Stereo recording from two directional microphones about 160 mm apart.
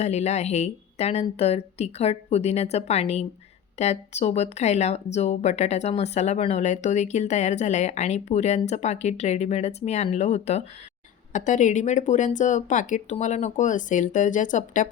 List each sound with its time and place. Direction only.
0.0 s speech: 45° left (ahead or behind)